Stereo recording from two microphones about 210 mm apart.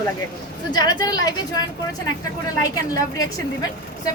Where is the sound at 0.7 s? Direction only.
20° left (ahead or behind).